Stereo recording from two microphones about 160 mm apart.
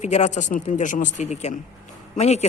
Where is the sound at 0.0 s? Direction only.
45° left (ahead or behind).